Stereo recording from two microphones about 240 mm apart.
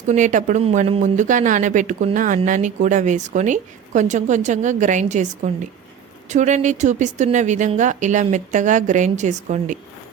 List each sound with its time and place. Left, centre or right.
0.1 s speech: right